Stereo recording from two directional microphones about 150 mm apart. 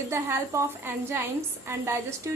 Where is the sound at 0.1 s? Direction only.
15° right (ahead or behind).